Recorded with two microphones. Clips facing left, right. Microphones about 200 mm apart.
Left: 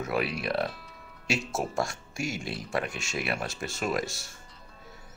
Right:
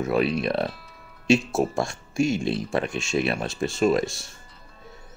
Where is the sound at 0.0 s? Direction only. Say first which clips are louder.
Right 7 dB; 25° right (ahead or behind).